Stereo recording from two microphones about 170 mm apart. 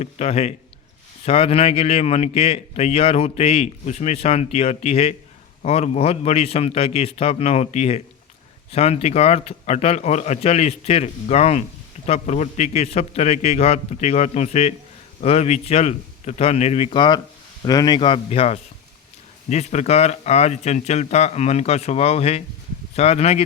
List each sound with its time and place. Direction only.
0.0 s a man's voice: 40° left (ahead or behind)